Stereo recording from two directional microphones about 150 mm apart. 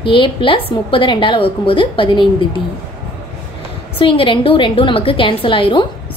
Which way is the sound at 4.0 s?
35° left (ahead or behind).